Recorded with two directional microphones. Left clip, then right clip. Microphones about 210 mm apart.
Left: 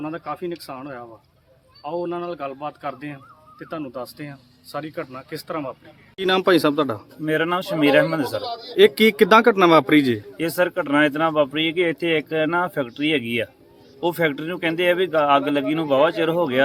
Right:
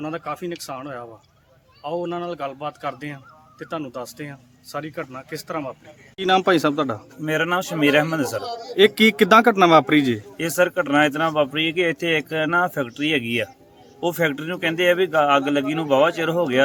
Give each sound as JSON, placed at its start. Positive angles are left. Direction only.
{"t": 0.0, "sound": "a man's voice", "side_deg": -40}
{"t": 7.3, "sound": "a man's voice", "side_deg": -5}
{"t": 10.4, "sound": "speech", "side_deg": -10}